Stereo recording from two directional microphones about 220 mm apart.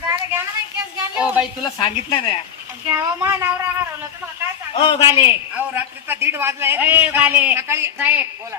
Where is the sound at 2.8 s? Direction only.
10° right (ahead or behind).